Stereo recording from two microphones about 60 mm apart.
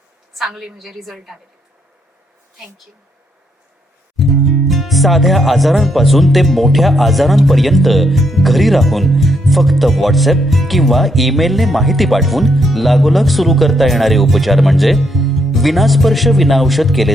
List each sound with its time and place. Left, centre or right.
0.3 s speech: centre
4.2 s speech: centre